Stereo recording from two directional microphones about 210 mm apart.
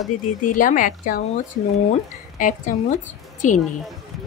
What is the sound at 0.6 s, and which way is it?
Speech, 40° left (ahead or behind).